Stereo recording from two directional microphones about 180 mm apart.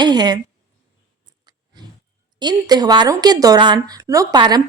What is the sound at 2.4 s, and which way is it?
A woman's voice, 25° right (ahead or behind).